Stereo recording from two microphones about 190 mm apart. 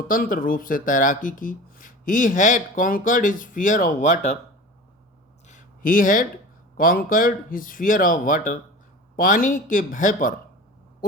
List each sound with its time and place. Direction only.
0.1 s speech: 45° left (ahead or behind)
5.5 s a sound: 45° left (ahead or behind)
6.7 s speech: 50° left (ahead or behind)